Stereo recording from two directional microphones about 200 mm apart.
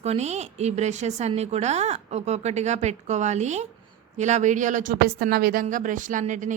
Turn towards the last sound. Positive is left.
turn(degrees=-40)  # may be behind; listen again after turning